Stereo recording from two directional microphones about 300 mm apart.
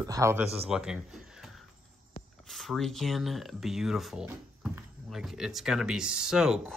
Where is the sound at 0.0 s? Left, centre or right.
Centre.